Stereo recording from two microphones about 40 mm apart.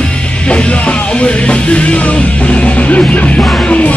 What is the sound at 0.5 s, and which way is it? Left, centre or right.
Music, left.